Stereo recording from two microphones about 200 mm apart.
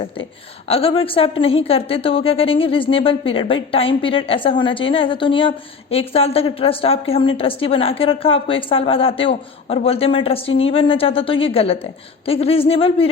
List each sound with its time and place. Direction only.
0.7 s a woman's voice: 30° left (ahead or behind)